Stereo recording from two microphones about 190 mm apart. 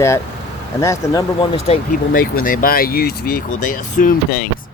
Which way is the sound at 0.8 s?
15° left (ahead or behind).